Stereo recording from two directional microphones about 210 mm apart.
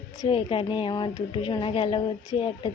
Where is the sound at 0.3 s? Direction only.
25° left (ahead or behind).